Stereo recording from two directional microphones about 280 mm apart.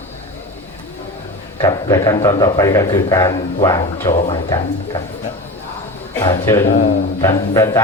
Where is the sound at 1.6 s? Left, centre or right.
Centre.